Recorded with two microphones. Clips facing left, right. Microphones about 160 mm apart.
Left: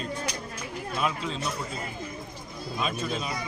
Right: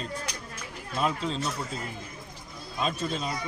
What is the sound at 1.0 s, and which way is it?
Speech, 35° right (ahead or behind).